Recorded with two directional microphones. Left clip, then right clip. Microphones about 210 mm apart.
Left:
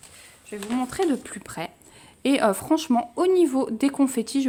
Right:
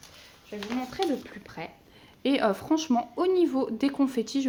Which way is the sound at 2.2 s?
20° left (ahead or behind).